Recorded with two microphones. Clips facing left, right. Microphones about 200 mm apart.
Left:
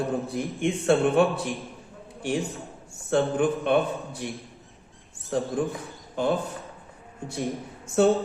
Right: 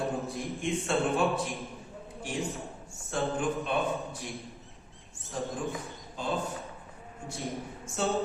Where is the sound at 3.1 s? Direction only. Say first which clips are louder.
Left 7 dB; 65° left (ahead or behind).